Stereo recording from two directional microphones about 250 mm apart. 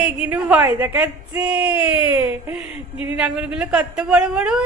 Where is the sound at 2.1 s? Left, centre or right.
Centre.